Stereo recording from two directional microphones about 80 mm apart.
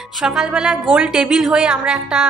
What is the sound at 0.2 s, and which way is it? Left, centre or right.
A woman's voice, centre.